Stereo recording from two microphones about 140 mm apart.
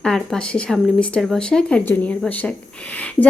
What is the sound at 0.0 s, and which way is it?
A woman's voice, 5° left (ahead or behind).